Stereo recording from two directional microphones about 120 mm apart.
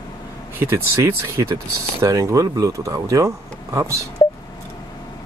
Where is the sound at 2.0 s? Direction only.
25° right (ahead or behind).